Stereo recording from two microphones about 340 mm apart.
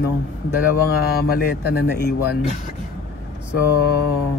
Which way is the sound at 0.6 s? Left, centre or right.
Left.